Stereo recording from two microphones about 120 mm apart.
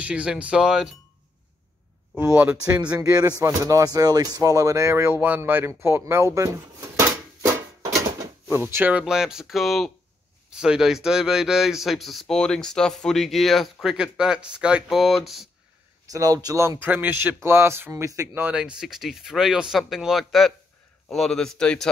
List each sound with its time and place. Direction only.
0.0 s speech: 10° right (ahead or behind)
2.1 s speech: 15° right (ahead or behind)
3.0 s speech: 30° right (ahead or behind); by 15.4 s centre (ahead or behind)
16.1 s speech: 30° right (ahead or behind); by 21.8 s 5° left (ahead or behind)